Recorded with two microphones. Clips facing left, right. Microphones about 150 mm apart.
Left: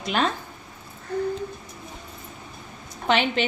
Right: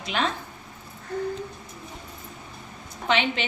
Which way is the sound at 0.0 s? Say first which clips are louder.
Left 3 dB; 45° left (ahead or behind).